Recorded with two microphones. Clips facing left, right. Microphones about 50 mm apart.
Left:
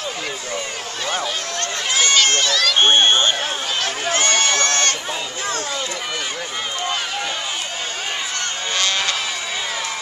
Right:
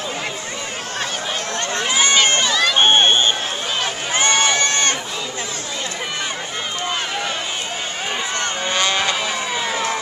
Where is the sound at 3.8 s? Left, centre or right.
Centre.